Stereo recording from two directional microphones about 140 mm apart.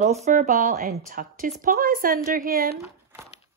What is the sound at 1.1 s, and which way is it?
A woman's voice, 90° right.